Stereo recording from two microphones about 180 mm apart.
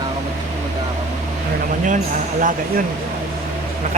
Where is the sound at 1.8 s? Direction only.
45° right (ahead or behind).